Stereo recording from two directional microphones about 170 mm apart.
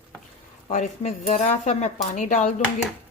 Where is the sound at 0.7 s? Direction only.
40° left (ahead or behind).